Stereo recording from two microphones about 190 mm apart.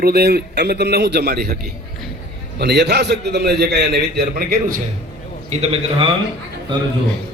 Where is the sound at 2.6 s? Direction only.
60° right (ahead or behind).